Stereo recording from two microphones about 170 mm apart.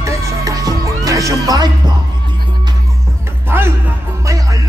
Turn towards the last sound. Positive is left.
turn(degrees=-15)  # may be behind; listen again after turning